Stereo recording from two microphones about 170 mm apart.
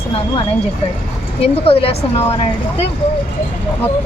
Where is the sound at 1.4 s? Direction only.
35° left (ahead or behind).